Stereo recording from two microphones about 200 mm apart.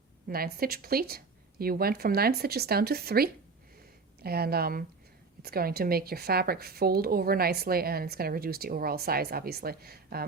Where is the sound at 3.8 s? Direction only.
50° right (ahead or behind).